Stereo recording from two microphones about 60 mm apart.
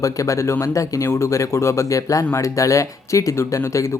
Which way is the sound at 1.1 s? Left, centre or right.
Left.